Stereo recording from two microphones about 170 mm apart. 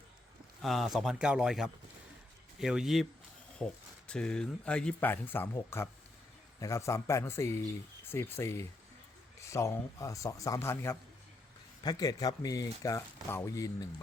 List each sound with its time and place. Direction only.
0.6 s speech: centre (ahead or behind); by 13.8 s 20° left (ahead or behind)